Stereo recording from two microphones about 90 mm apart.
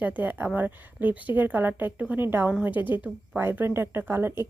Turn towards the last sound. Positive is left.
turn(degrees=-25)  # may be behind; listen again after turning